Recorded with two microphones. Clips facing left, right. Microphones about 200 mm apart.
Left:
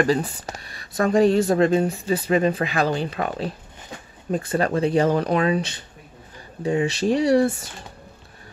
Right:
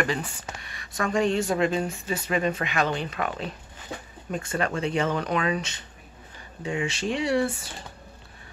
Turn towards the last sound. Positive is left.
turn(degrees=40)  # may be behind; listen again after turning